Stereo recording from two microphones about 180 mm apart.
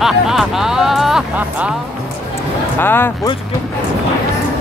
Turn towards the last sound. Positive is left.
turn(degrees=10)  # may be behind; listen again after turning